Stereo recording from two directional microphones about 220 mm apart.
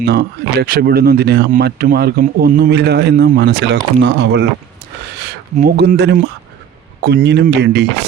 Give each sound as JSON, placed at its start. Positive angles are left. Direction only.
{"t": 0.0, "sound": "speech", "side_deg": -50}
{"t": 5.5, "sound": "speech", "side_deg": -45}